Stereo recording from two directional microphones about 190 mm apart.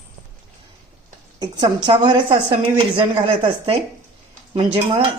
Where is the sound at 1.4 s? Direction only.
20° right (ahead or behind).